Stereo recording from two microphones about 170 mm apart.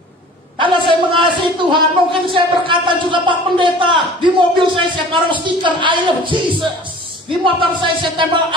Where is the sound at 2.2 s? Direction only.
30° right (ahead or behind).